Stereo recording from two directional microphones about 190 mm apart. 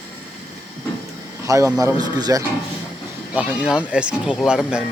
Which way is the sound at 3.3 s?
5° right (ahead or behind).